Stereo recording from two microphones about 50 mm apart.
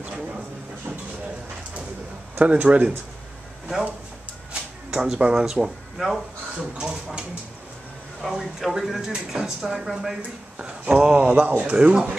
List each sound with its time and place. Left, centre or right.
0.9 s vehicle: right
2.3 s speech: right
4.9 s speech: centre
9.1 s speech: centre
11.1 s speech: right